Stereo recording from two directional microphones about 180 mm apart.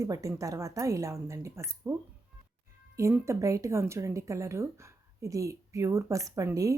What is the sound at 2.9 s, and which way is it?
A woman's voice, 15° right (ahead or behind).